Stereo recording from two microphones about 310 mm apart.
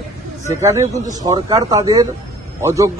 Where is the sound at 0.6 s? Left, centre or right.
Centre.